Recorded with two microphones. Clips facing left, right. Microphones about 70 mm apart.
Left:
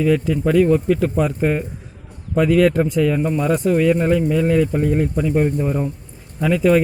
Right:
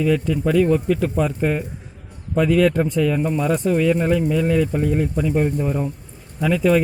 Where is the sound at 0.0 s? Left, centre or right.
Centre.